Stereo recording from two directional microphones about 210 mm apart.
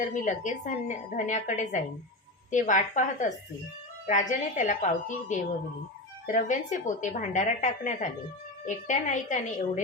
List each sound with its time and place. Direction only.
0.0 s a woman's voice: 35° left (ahead or behind)